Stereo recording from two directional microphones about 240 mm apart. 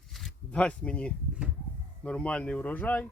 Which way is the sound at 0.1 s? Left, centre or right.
Centre.